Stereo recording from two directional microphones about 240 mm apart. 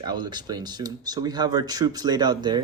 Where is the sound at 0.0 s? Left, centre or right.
Centre.